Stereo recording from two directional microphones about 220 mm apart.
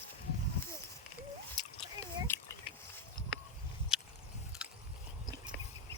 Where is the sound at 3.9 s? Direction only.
5° right (ahead or behind).